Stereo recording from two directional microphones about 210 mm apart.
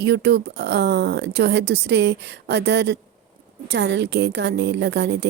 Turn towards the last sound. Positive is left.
turn(degrees=-55)  # may be behind; listen again after turning